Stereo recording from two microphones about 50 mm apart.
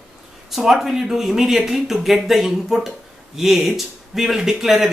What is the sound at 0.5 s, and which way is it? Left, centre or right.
Speech, centre.